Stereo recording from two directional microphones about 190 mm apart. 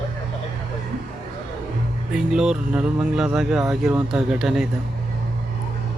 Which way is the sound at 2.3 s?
5° right (ahead or behind).